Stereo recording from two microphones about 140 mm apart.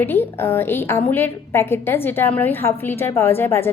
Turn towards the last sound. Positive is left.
turn(degrees=15)  # may be behind; listen again after turning